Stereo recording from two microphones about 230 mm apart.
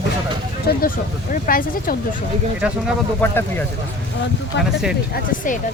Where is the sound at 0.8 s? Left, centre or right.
Left.